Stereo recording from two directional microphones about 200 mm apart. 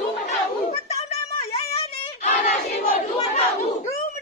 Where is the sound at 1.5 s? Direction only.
30° left (ahead or behind).